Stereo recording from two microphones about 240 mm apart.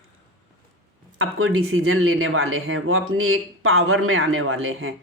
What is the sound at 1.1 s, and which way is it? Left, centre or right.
Speech, right.